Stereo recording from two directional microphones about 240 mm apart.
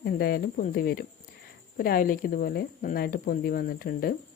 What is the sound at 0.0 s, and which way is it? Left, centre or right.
Speech, left.